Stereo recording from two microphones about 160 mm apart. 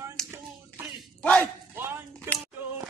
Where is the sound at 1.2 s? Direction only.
5° left (ahead or behind).